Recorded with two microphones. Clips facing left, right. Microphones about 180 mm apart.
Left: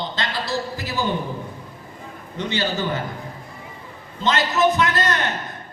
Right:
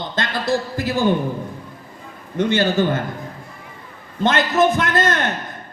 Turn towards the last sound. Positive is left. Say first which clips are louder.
# right 2 dB
turn(degrees=-50)  # may be behind; listen again after turning